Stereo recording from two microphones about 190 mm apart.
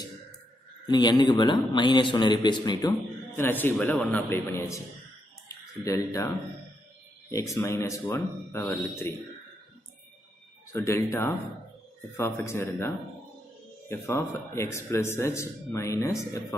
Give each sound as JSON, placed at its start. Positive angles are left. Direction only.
{"t": 0.8, "sound": "speech", "side_deg": 20}
{"t": 3.3, "sound": "a man's voice", "side_deg": 10}
{"t": 5.9, "sound": "a man's voice", "side_deg": 15}
{"t": 10.7, "sound": "a man's voice", "side_deg": 15}